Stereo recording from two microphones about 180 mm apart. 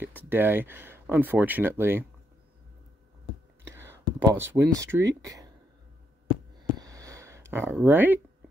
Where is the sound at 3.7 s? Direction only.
10° right (ahead or behind).